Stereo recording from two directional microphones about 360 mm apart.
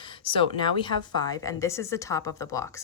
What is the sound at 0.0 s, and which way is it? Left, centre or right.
Speech, centre.